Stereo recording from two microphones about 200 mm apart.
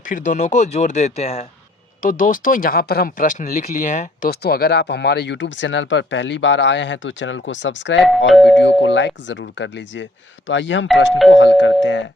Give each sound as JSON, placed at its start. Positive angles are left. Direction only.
{"t": 0.1, "sound": "speech", "side_deg": 40}
{"t": 2.0, "sound": "speech", "side_deg": 40}
{"t": 4.3, "sound": "speech", "side_deg": 50}
{"t": 8.3, "sound": "speech", "side_deg": 0}
{"t": 8.6, "sound": "speech", "side_deg": 65}